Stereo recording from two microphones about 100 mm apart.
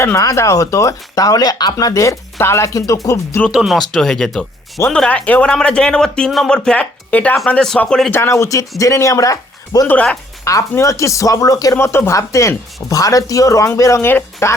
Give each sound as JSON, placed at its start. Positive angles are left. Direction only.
{"t": 0.0, "sound": "speech", "side_deg": 30}
{"t": 3.5, "sound": "speech", "side_deg": -5}
{"t": 8.1, "sound": "speech", "side_deg": 25}
{"t": 9.8, "sound": "speech", "side_deg": 15}
{"t": 10.4, "sound": "speech", "side_deg": 35}
{"t": 11.8, "sound": "speech", "side_deg": 25}